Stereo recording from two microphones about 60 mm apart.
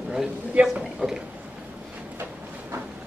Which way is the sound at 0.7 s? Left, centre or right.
Centre.